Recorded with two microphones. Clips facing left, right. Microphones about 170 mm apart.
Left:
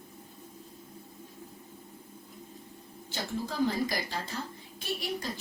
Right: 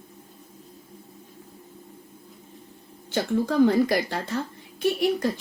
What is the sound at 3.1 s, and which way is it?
A woman's voice, 60° right (ahead or behind).